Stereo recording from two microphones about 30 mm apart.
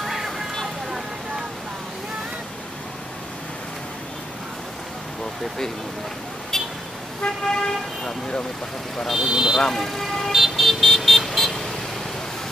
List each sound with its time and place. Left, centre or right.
0.0 s a sound: centre
6.5 s vehicle: centre
7.2 s speech: left
9.2 s speech: centre
9.8 s speech: centre
10.3 s vehicle: centre